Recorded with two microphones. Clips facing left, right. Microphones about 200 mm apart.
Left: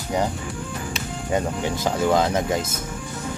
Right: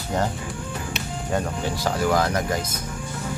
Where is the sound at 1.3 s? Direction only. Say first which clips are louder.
Left 2 dB; 20° left (ahead or behind).